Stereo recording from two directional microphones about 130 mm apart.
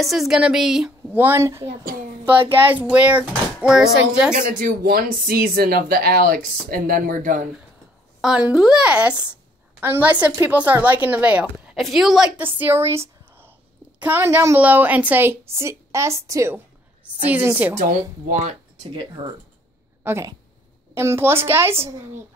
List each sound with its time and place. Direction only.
0.0 s speech: centre (ahead or behind)
1.1 s a woman's voice: 15° right (ahead or behind)
4.4 s speech: 90° right
8.2 s a woman's voice: 5° right (ahead or behind)
11.7 s speech: centre (ahead or behind)
12.5 s a woman's voice: 15° right (ahead or behind)
18.3 s speech: 60° right (ahead or behind)
19.2 s speech: 30° right (ahead or behind)
20.0 s a woman's voice: 20° right (ahead or behind)